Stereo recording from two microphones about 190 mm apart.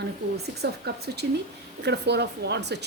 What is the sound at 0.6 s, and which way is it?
Speech, 60° right (ahead or behind).